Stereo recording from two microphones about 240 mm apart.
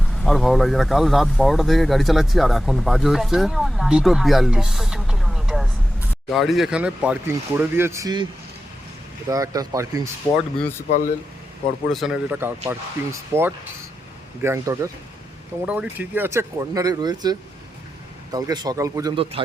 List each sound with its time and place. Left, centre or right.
0.2 s speech: centre
9.3 s speech: centre
10.2 s speech: centre
10.8 s speech: left
11.9 s speech: centre
14.4 s speech: centre